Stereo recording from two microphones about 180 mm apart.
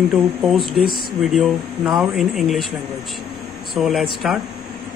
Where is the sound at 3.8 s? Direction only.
Centre (ahead or behind).